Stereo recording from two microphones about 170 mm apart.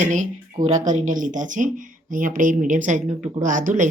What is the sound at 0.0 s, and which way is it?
Speech, 50° right (ahead or behind).